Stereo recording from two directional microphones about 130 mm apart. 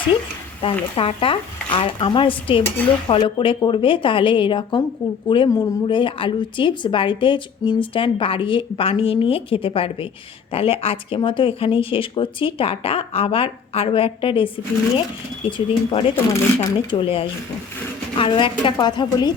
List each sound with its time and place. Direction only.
0.6 s speech: 45° left (ahead or behind); by 5.7 s 25° left (ahead or behind)
5.9 s speech: 40° left (ahead or behind)
16.1 s speech: 15° left (ahead or behind)
16.6 s a woman's voice: 40° left (ahead or behind)